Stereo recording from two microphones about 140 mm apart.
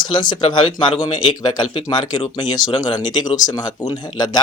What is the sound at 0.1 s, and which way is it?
Speech, 35° left (ahead or behind).